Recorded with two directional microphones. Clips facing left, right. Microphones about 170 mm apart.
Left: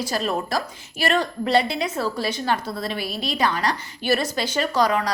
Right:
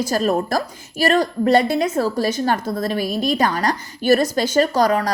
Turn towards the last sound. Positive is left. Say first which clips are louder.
# right 5 dB
turn(degrees=-40)  # may be behind; listen again after turning